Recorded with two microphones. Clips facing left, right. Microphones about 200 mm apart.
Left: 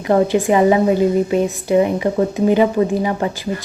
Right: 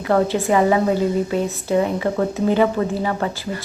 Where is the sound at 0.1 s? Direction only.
15° left (ahead or behind).